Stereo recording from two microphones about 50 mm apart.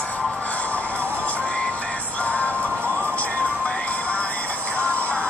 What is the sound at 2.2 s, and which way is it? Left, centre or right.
Music, left.